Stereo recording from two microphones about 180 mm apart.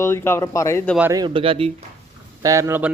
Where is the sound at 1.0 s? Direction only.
20° right (ahead or behind).